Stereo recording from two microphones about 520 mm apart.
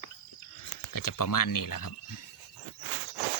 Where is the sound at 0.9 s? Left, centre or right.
Left.